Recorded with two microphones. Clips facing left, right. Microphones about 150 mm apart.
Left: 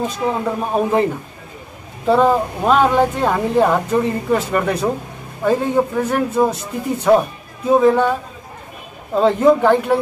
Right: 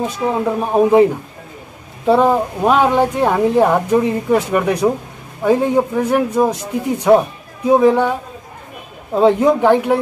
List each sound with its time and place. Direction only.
0.0 s speech: 10° right (ahead or behind)
2.0 s speech: 15° right (ahead or behind)